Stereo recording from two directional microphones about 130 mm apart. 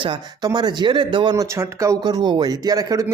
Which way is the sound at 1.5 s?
25° right (ahead or behind).